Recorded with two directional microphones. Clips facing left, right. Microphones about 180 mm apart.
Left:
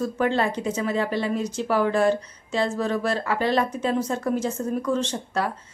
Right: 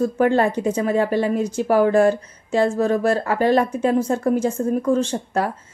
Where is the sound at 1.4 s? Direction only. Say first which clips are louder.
Right 5 dB; 10° right (ahead or behind).